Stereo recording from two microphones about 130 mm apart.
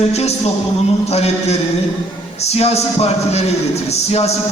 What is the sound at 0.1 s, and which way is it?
A man's voice, 55° left (ahead or behind).